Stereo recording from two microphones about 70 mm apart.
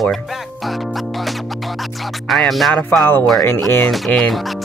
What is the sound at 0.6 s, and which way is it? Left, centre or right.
Music, centre.